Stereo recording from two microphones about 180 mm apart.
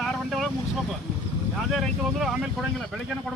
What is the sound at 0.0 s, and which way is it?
Vehicle, centre (ahead or behind).